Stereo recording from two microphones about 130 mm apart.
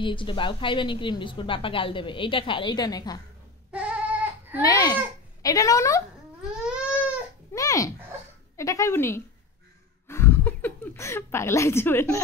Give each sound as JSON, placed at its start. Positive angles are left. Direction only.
{"t": 0.0, "sound": "a woman's voice", "side_deg": 40}
{"t": 3.7, "sound": "goat", "side_deg": -10}
{"t": 4.6, "sound": "a woman's voice", "side_deg": 30}
{"t": 6.6, "sound": "crying", "side_deg": -10}
{"t": 7.5, "sound": "a woman's voice", "side_deg": 25}
{"t": 10.0, "sound": "a sound", "side_deg": 20}